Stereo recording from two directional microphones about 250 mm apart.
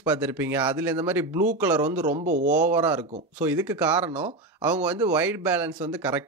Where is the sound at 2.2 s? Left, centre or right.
Right.